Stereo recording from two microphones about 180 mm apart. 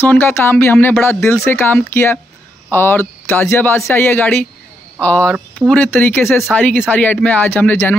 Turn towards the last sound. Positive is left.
turn(degrees=10)  # may be behind; listen again after turning